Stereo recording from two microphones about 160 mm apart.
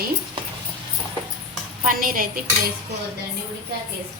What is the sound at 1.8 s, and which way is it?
Speech, 60° right (ahead or behind).